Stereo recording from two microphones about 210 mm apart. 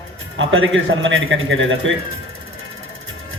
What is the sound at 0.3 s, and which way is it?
A man's voice, 65° right (ahead or behind).